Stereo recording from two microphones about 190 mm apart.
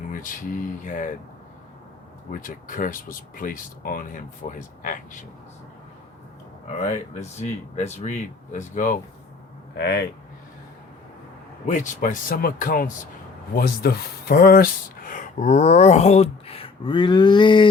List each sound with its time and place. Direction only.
0.1 s speech: 45° left (ahead or behind)
2.3 s speech: 45° left (ahead or behind)
6.7 s speech: 35° left (ahead or behind)
9.7 s speech: 60° left (ahead or behind)
11.6 s speech: 40° left (ahead or behind); by 17.7 s 25° left (ahead or behind)